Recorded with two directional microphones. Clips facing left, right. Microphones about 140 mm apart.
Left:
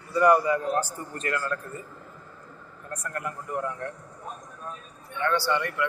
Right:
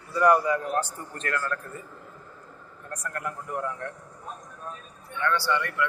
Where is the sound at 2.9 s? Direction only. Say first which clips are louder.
Even; 5° left (ahead or behind).